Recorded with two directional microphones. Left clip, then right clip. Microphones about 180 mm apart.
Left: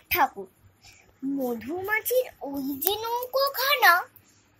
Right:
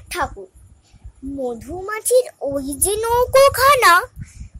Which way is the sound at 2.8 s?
40° right (ahead or behind).